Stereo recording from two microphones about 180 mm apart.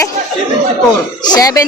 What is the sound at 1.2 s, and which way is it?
Speech, 20° left (ahead or behind).